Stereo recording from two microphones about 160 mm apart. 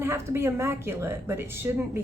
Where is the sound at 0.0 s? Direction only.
15° right (ahead or behind).